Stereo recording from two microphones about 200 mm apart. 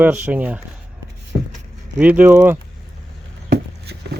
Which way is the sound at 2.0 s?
10° right (ahead or behind).